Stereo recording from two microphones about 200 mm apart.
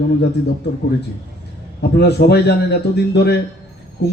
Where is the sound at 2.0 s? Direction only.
55° left (ahead or behind).